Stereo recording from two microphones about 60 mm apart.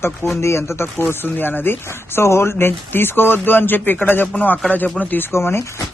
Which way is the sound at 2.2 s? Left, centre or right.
Left.